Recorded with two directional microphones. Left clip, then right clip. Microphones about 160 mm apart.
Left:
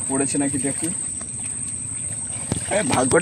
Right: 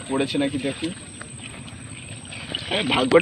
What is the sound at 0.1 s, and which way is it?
Speech, 25° left (ahead or behind).